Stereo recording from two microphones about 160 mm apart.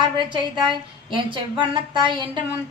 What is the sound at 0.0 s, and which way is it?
A woman's voice, 30° right (ahead or behind).